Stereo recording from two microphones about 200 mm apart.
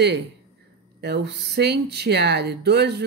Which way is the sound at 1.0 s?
55° right (ahead or behind).